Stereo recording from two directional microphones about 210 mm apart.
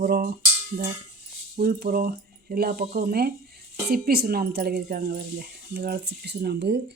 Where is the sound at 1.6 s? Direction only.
45° right (ahead or behind).